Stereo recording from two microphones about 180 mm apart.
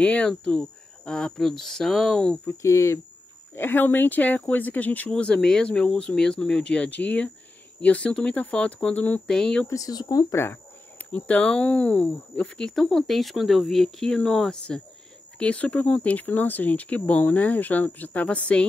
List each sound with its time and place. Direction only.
0.0 s speech: 10° left (ahead or behind)
2.5 s speech: 15° left (ahead or behind)
9.7 s speech: 20° left (ahead or behind)